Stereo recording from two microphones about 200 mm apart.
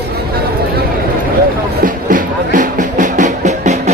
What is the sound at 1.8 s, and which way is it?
Music, 40° right (ahead or behind).